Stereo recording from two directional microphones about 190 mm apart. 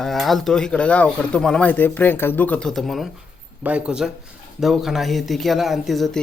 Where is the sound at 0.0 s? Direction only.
Centre (ahead or behind).